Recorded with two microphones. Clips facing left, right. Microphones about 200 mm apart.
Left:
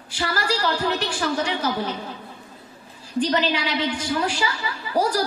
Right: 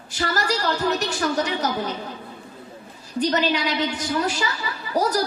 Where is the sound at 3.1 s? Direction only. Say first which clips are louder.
Even; 45° right (ahead or behind).